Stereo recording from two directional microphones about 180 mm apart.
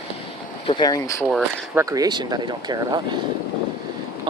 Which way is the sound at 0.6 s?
25° left (ahead or behind).